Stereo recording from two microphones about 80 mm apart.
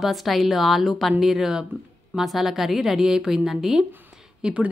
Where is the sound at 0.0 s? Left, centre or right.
Centre.